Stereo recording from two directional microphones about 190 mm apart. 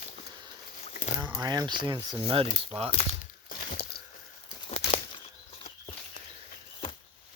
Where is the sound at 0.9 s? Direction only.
35° left (ahead or behind).